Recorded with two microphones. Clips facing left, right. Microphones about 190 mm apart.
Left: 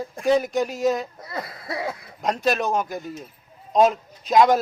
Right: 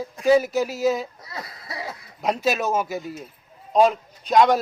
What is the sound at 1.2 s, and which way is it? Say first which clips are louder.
Throat clearing: left 4 dB; 55° left (ahead or behind).